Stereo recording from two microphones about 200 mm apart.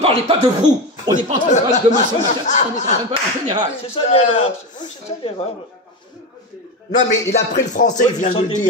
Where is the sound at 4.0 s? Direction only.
30° left (ahead or behind).